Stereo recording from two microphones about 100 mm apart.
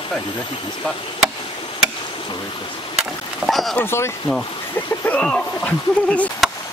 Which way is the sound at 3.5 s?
Centre (ahead or behind).